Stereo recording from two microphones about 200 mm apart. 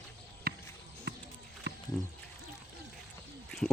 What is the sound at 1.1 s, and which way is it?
Music, 55° right (ahead or behind).